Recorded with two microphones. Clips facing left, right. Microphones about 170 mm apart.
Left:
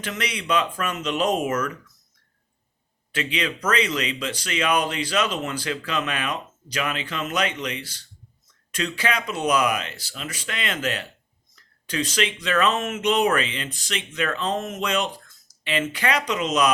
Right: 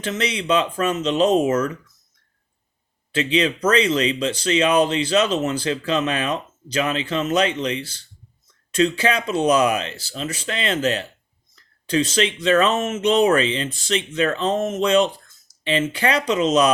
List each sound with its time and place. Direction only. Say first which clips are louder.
0.0 s speech: right 5 dB; 30° right (ahead or behind)
3.2 s speech: right 7 dB; 30° right (ahead or behind)